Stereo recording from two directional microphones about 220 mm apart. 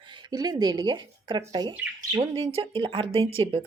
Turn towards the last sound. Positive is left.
turn(degrees=-25)  # may be behind; listen again after turning